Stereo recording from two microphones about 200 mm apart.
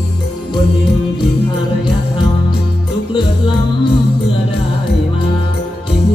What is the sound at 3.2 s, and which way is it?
Music, 25° left (ahead or behind).